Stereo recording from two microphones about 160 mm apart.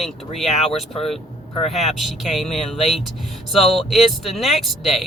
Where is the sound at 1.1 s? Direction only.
40° left (ahead or behind).